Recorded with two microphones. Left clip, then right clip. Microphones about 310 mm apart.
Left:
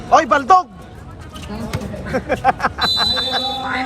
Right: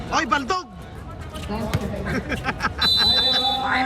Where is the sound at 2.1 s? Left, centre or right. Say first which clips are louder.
Left 11 dB; centre.